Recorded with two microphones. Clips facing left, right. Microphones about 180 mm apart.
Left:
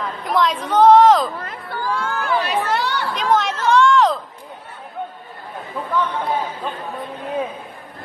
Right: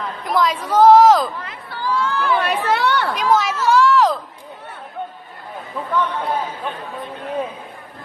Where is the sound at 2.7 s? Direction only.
60° right (ahead or behind).